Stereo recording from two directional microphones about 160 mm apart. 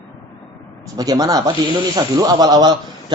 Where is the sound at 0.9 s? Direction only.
25° right (ahead or behind).